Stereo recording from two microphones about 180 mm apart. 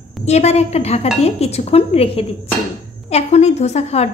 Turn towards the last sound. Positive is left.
turn(degrees=35)  # may be behind; listen again after turning